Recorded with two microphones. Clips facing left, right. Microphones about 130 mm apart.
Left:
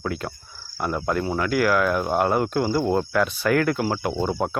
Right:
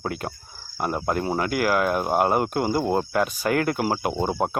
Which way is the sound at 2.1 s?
10° right (ahead or behind).